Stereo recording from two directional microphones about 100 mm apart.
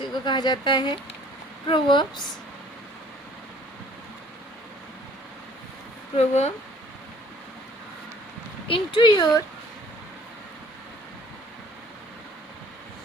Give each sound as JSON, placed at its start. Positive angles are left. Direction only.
{"t": 0.0, "sound": "speech", "side_deg": 50}
{"t": 6.1, "sound": "speech", "side_deg": 90}
{"t": 8.6, "sound": "speech", "side_deg": 65}
{"t": 9.0, "sound": "speech", "side_deg": 50}